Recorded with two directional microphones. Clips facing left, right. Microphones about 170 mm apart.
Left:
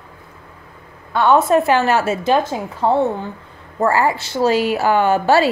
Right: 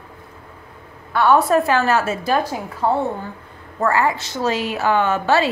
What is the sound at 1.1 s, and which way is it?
A woman's voice, 20° left (ahead or behind).